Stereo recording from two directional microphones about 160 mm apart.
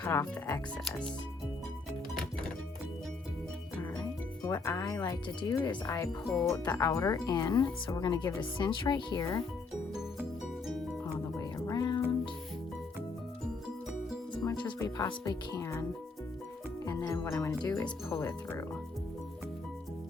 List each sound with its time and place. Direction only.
0.0 s speech: 20° left (ahead or behind)
0.9 s speech: 5° left (ahead or behind)
4.4 s speech: 15° left (ahead or behind)
11.0 s music: 20° left (ahead or behind)
14.4 s music: 25° left (ahead or behind)
18.1 s speech: 15° left (ahead or behind)